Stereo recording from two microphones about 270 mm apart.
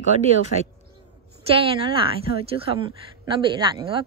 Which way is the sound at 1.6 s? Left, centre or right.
Centre.